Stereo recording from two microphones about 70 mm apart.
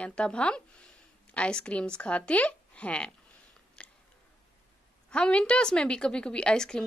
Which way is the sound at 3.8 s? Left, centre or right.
Centre.